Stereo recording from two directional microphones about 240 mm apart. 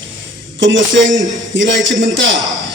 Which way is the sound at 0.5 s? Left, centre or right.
Right.